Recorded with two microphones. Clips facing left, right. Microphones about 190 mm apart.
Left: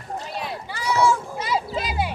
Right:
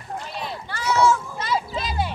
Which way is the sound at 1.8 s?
10° left (ahead or behind).